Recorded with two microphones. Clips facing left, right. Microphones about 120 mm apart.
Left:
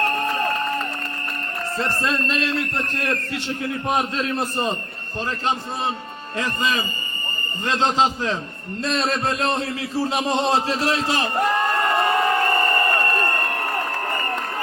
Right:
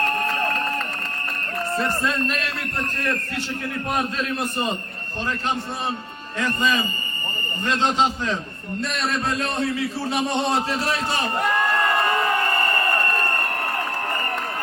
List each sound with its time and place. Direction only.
2.0 s a man's voice: 25° left (ahead or behind)
3.8 s a man's voice: 25° left (ahead or behind)
8.8 s a man's voice: 30° left (ahead or behind)
10.2 s a man's voice: 90° left